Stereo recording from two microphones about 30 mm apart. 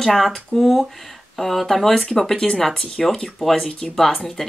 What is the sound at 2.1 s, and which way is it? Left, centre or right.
Speech, centre.